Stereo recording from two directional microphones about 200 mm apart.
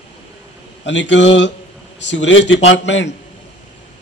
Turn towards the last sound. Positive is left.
turn(degrees=65)  # may be behind; listen again after turning